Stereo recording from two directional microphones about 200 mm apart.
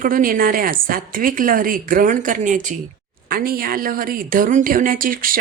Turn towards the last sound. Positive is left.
turn(degrees=-45)  # may be behind; listen again after turning